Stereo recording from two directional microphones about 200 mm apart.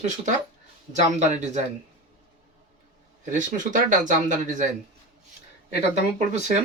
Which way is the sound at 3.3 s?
40° right (ahead or behind).